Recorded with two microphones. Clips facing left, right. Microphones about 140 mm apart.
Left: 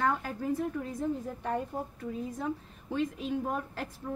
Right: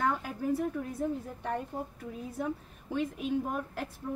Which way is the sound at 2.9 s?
10° right (ahead or behind).